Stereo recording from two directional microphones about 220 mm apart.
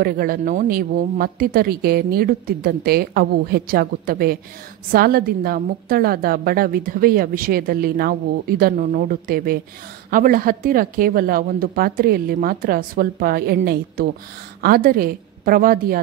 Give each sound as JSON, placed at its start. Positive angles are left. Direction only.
{"t": 0.0, "sound": "a woman's voice", "side_deg": -45}
{"t": 14.6, "sound": "a woman's voice", "side_deg": -40}